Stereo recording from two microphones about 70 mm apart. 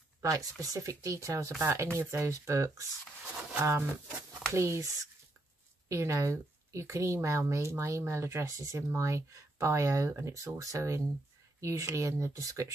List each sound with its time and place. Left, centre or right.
0.2 s a woman's voice: right